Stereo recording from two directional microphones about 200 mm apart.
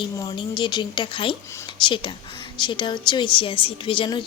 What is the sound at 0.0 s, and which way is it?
A woman's voice, 25° left (ahead or behind).